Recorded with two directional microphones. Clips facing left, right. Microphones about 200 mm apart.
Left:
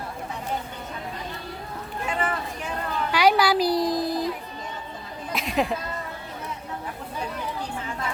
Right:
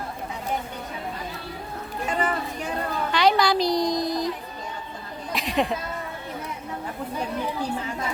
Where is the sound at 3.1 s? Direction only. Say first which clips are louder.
Left 1 dB; 10° left (ahead or behind).